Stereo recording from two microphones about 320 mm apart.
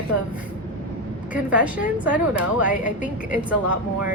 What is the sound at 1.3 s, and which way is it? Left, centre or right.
Speech, centre.